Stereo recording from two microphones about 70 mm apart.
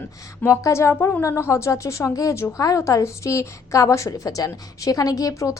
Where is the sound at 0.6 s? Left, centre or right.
Left.